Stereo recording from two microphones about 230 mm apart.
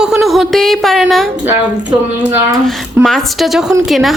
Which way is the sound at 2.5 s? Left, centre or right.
Centre.